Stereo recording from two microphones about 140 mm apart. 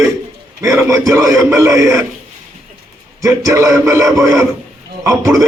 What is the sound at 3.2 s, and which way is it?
Speech, 20° right (ahead or behind).